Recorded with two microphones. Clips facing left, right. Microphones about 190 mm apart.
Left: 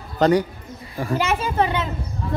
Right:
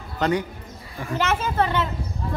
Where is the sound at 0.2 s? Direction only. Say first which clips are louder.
Left 6 dB; 35° left (ahead or behind).